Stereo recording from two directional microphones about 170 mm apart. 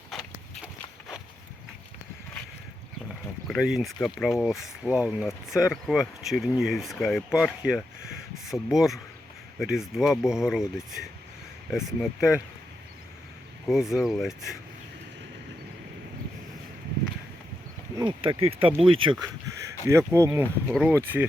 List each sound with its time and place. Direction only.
0.1 s walk: centre (ahead or behind)
3.4 s speech: centre (ahead or behind)
11.7 s speech: 5° right (ahead or behind)
13.7 s speech: centre (ahead or behind)
17.9 s speech: 25° right (ahead or behind)
19.9 s speech: 15° right (ahead or behind)
20.7 s speech: centre (ahead or behind)
20.9 s speech: 10° right (ahead or behind)